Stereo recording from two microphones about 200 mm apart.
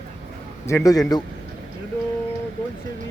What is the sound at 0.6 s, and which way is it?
Speech, 15° left (ahead or behind).